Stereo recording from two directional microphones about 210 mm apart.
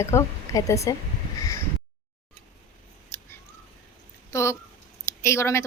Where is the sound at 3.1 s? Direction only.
10° left (ahead or behind).